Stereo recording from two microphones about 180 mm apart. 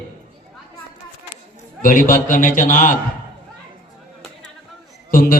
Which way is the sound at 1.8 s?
50° left (ahead or behind).